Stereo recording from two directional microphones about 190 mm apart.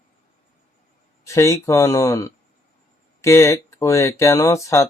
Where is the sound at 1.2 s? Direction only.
15° left (ahead or behind).